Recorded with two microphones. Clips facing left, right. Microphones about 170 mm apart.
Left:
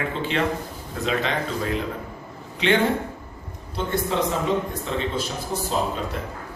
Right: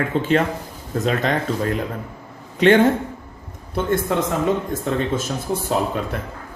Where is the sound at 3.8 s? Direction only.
50° right (ahead or behind).